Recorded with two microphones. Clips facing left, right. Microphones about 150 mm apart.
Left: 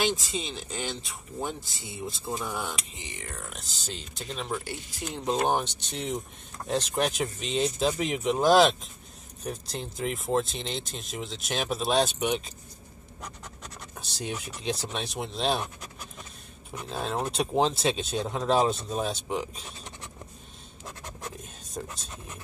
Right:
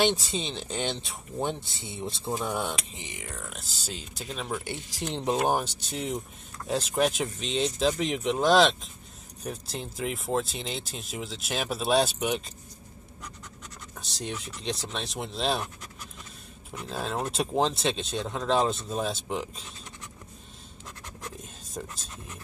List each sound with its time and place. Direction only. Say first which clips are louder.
0.3 s speech: right 2 dB; 25° right (ahead or behind)
3.5 s speech: even; 5° right (ahead or behind)
13.2 s scratch: left 3 dB; 55° left (ahead or behind)
13.9 s speech: left 1 dB; centre (ahead or behind)
16.7 s speech: left 1 dB; centre (ahead or behind)
20.8 s scratch: left 2 dB; 25° left (ahead or behind)
21.8 s speech: left 1 dB; centre (ahead or behind)